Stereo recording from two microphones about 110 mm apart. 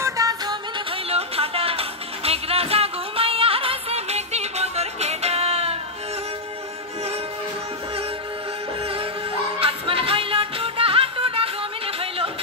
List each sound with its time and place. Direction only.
0.0 s music: 35° right (ahead or behind)
0.7 s music: 65° right (ahead or behind)
8.8 s music: 55° right (ahead or behind)